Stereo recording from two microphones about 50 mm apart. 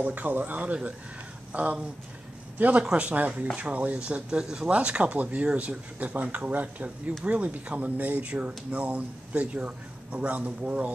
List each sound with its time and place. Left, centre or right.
0.0 s speech: right